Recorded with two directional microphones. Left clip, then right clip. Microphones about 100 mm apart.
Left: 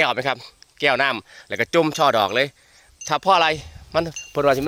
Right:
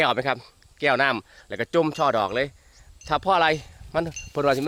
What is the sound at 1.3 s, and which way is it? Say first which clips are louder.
Speech: left 4 dB; 40° left (ahead or behind).